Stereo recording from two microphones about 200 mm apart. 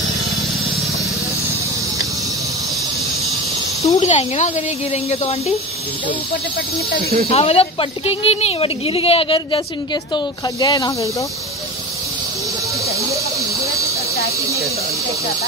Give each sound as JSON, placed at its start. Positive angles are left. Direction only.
{"t": 3.8, "sound": "speech", "side_deg": 35}
{"t": 7.2, "sound": "speech", "side_deg": 30}